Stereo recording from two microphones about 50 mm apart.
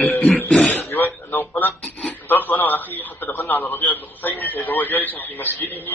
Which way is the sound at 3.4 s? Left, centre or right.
Left.